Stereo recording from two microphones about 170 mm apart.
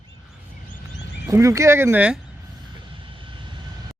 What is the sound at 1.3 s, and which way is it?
Speech, 15° right (ahead or behind).